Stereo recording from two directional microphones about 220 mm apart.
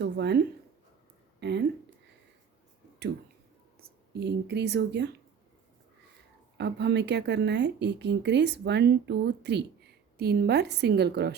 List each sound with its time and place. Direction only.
0.0 s speech: 50° right (ahead or behind)
3.8 s speech: 45° right (ahead or behind)
6.6 s speech: 50° right (ahead or behind)